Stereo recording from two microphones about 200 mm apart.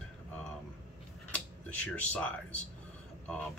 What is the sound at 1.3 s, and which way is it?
Speech, 5° left (ahead or behind).